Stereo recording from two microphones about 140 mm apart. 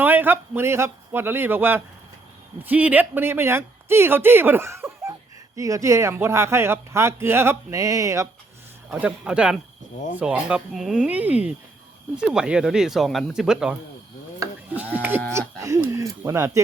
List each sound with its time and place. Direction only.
0.0 s speech: 15° right (ahead or behind)
8.9 s speech: 10° right (ahead or behind)
14.4 s livestock: 20° right (ahead or behind)
14.9 s speech: 15° right (ahead or behind)
15.3 s a sound: 20° right (ahead or behind)